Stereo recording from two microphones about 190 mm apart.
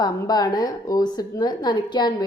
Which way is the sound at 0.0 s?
20° left (ahead or behind).